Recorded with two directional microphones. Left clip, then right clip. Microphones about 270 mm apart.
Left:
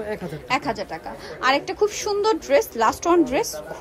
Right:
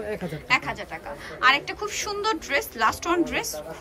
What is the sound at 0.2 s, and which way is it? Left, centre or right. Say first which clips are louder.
A woman's voice: right 3 dB; centre.